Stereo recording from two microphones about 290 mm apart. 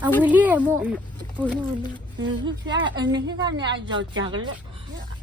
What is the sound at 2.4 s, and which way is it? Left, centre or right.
A woman's voice, centre.